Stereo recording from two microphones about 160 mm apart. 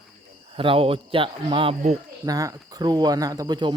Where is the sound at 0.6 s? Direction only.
35° right (ahead or behind).